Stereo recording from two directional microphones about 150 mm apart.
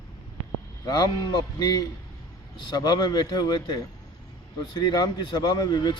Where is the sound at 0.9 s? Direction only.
25° left (ahead or behind).